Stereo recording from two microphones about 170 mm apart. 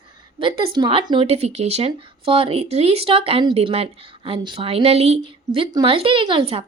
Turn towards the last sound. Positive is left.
turn(degrees=-30)  # may be behind; listen again after turning